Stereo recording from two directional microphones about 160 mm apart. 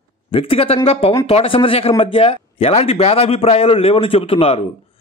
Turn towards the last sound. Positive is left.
turn(degrees=35)  # may be behind; listen again after turning